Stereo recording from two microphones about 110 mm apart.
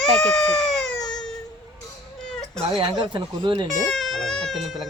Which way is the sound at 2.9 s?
45° right (ahead or behind).